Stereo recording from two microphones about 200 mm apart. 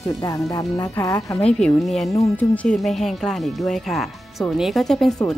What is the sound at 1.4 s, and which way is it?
Speech, 5° left (ahead or behind).